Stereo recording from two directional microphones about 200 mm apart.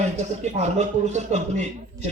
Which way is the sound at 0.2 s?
35° right (ahead or behind).